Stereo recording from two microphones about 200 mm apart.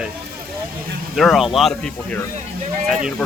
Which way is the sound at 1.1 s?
Centre (ahead or behind).